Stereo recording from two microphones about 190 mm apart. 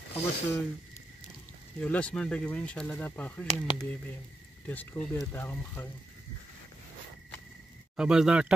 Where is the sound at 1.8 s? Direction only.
5° left (ahead or behind).